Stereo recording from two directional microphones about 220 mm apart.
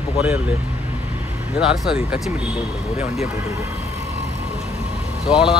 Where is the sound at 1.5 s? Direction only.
5° right (ahead or behind).